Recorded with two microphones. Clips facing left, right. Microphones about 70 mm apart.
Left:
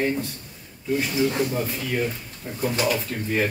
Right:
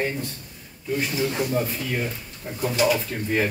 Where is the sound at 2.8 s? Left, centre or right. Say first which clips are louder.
Right 2 dB; centre.